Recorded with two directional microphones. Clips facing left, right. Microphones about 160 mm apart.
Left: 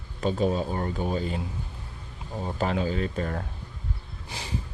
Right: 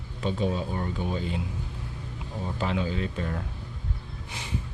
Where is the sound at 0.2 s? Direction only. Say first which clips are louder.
Left 3 dB; 40° left (ahead or behind).